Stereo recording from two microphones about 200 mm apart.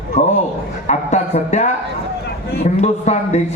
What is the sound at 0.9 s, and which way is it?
Speech, 35° left (ahead or behind).